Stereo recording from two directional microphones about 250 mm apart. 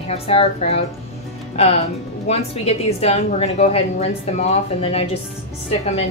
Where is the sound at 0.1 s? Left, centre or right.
Left.